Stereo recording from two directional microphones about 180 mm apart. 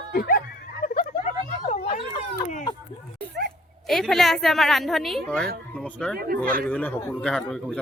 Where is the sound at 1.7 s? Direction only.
40° left (ahead or behind).